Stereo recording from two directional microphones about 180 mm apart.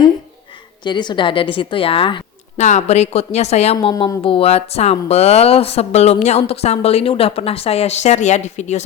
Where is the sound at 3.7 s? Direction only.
25° left (ahead or behind).